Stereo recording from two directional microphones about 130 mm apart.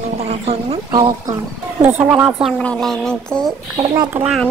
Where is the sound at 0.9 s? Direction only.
40° right (ahead or behind).